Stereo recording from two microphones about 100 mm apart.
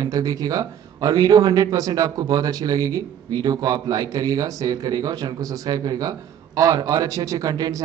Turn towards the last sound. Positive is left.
turn(degrees=-40)  # may be behind; listen again after turning